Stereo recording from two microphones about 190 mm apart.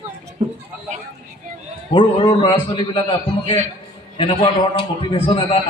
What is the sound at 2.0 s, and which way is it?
A man's voice, 30° left (ahead or behind).